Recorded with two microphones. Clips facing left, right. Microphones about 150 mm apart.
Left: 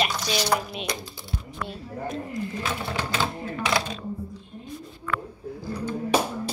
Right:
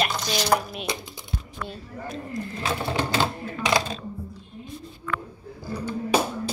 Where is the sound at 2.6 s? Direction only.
30° right (ahead or behind).